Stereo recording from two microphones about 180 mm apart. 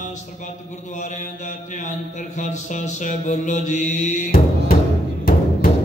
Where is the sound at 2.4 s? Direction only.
40° left (ahead or behind).